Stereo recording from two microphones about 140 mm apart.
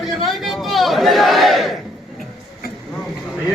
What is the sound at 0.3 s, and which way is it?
Chatter, centre (ahead or behind).